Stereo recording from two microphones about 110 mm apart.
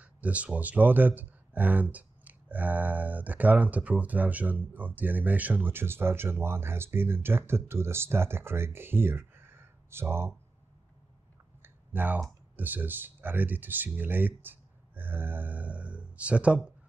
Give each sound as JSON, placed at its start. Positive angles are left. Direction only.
{"t": 0.0, "sound": "speech", "side_deg": -10}
{"t": 11.6, "sound": "clicking", "side_deg": -15}
{"t": 12.5, "sound": "speech", "side_deg": -15}